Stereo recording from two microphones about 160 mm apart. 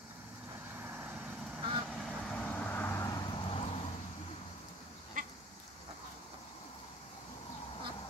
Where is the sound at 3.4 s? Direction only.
35° left (ahead or behind).